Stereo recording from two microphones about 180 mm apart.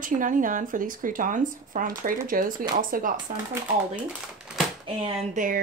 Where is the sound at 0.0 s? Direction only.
50° right (ahead or behind).